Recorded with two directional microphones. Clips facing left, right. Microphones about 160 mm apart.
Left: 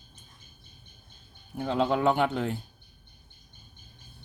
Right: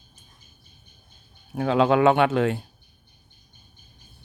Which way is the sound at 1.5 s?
90° right.